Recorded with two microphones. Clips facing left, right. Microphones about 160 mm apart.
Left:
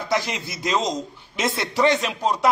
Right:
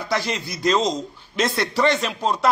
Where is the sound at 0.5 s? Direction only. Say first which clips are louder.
Right 4 dB; 10° left (ahead or behind).